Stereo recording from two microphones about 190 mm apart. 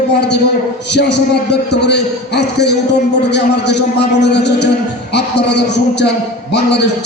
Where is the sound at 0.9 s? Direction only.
65° left (ahead or behind).